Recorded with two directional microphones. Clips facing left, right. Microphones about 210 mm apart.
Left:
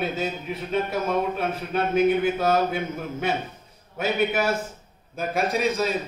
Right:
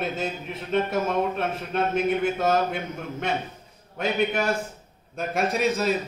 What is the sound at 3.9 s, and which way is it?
A man's voice, 5° left (ahead or behind).